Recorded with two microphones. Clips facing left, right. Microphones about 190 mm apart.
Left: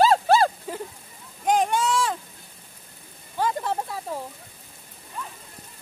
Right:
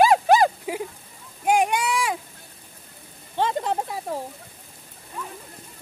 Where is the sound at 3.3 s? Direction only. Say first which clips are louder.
Right 2 dB; 25° right (ahead or behind).